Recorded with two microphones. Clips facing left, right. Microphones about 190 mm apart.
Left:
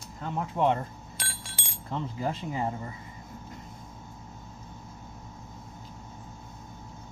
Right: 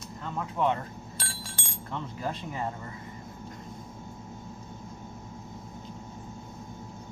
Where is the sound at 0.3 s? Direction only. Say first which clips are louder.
Left 2 dB; 25° left (ahead or behind).